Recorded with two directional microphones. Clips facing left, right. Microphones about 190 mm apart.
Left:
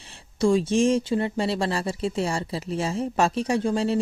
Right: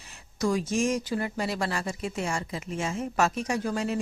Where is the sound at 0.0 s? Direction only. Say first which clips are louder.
Left 6 dB; 30° left (ahead or behind).